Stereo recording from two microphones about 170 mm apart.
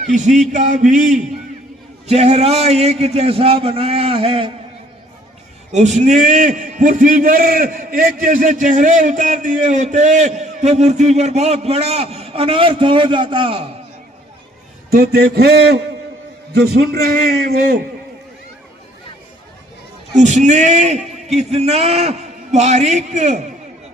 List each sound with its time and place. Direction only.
0.0 s a man's voice: 45° right (ahead or behind)
5.7 s a man's voice: 45° right (ahead or behind)
14.8 s a man's voice: 65° right (ahead or behind)
20.1 s a man's voice: 45° right (ahead or behind)